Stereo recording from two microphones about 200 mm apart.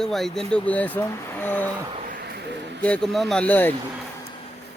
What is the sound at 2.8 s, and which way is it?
Speech, 5° left (ahead or behind).